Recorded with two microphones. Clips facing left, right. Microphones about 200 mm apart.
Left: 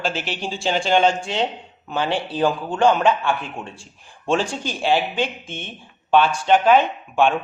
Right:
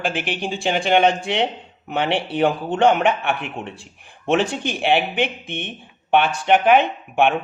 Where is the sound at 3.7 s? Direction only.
60° right (ahead or behind).